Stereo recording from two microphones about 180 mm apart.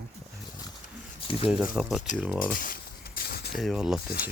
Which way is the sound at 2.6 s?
55° left (ahead or behind).